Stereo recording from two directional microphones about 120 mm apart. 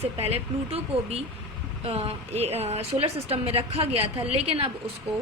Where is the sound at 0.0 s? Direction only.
60° right (ahead or behind).